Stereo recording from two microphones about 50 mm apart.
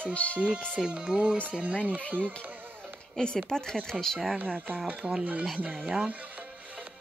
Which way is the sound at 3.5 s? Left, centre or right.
Centre.